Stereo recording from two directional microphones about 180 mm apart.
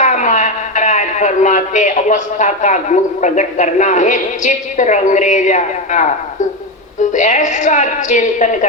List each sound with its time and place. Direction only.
0.0 s a man's voice: 40° left (ahead or behind)